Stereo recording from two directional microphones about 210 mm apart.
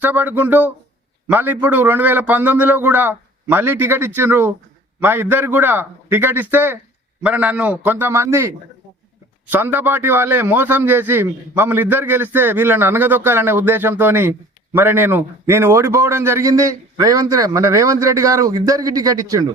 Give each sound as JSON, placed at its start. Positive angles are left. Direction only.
{"t": 0.0, "sound": "a man's voice", "side_deg": -10}